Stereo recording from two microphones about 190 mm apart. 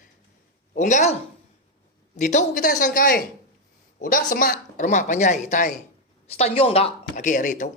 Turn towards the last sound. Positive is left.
turn(degrees=40)  # may be behind; listen again after turning